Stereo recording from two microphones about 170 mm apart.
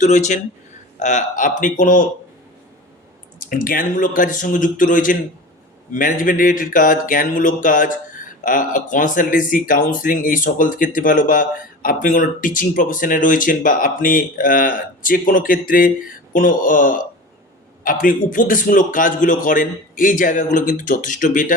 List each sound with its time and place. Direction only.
0.0 s speech: 45° left (ahead or behind)
3.4 s speech: 55° left (ahead or behind)